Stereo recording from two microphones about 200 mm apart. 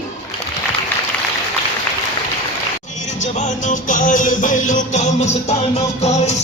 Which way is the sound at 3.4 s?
40° left (ahead or behind).